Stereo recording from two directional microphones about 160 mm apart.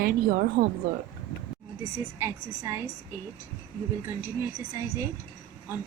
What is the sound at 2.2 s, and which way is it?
Speech, 15° right (ahead or behind).